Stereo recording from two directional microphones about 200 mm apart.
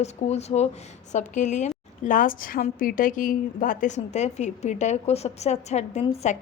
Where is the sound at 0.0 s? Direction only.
35° left (ahead or behind).